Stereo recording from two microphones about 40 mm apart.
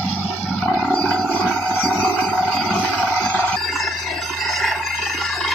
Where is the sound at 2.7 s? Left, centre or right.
Left.